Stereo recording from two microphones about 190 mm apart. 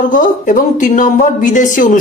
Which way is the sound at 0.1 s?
45° left (ahead or behind).